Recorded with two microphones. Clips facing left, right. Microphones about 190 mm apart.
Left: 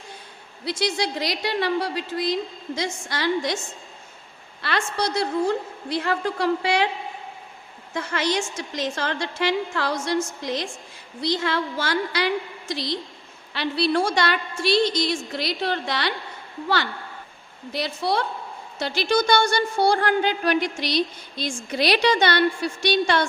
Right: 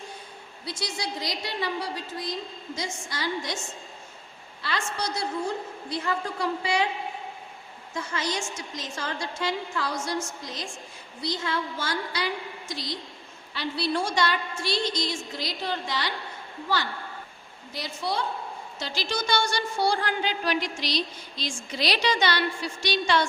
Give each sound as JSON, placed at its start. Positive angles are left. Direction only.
{"t": 0.6, "sound": "a woman's voice", "side_deg": 75}
{"t": 4.6, "sound": "a woman's voice", "side_deg": 70}
{"t": 7.9, "sound": "a woman's voice", "side_deg": 75}
{"t": 17.7, "sound": "a woman's voice", "side_deg": 70}